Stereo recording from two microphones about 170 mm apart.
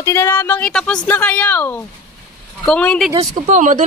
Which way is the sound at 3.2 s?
45° right (ahead or behind).